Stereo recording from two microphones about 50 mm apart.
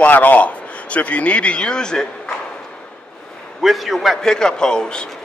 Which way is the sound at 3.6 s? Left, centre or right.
Centre.